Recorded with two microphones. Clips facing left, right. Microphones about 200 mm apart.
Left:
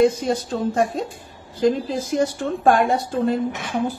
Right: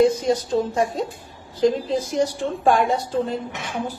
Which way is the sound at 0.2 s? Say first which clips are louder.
Right 2 dB; 55° left (ahead or behind).